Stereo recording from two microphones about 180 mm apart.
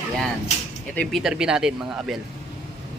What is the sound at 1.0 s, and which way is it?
A woman's voice, centre (ahead or behind).